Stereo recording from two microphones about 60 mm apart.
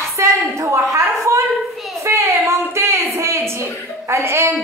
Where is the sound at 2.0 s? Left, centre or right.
Right.